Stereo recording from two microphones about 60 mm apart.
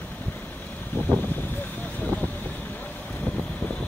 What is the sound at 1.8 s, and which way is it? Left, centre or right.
Vehicle, left.